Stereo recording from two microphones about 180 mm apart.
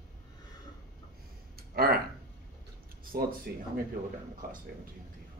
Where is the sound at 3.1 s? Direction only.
55° right (ahead or behind).